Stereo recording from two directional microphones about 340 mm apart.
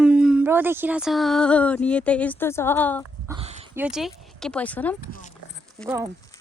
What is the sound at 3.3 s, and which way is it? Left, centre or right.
Dog, centre.